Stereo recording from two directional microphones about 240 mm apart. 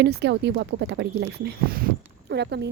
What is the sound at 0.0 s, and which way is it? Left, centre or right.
Speech, right.